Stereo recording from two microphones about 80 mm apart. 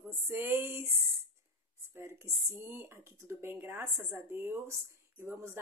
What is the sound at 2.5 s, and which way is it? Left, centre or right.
Speech, right.